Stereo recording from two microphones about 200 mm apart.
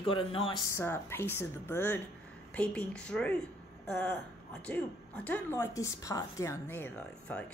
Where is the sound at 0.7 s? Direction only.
10° left (ahead or behind).